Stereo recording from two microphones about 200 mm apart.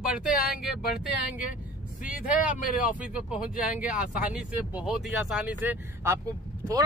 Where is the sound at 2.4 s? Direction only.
40° left (ahead or behind).